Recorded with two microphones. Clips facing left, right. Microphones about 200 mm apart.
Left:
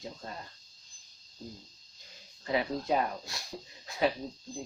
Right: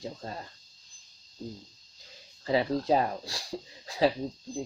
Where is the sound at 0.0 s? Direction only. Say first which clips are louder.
Right 4 dB; 30° right (ahead or behind).